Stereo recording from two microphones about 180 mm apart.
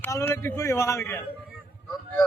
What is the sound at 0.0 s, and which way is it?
A man's voice, 15° left (ahead or behind).